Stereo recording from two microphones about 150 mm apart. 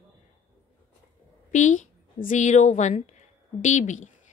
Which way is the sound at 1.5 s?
55° left (ahead or behind).